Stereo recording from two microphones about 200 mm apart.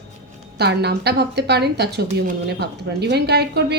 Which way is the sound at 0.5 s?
55° right (ahead or behind).